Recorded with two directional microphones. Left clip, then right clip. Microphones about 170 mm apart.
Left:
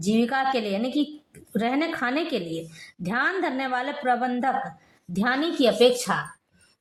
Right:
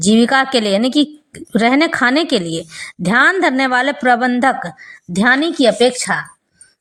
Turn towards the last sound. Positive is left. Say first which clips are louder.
# right 5 dB
turn(degrees=-25)  # may be behind; listen again after turning